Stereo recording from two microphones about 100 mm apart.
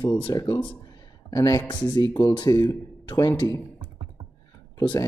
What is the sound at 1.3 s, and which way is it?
Speech, 40° left (ahead or behind).